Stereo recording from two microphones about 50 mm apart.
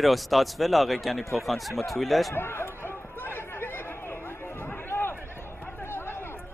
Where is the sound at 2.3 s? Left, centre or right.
Left.